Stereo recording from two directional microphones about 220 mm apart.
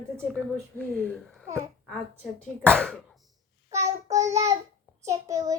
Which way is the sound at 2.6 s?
5° left (ahead or behind).